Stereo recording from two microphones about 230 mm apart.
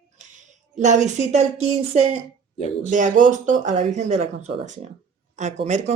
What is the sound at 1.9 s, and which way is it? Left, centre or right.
Speech, right.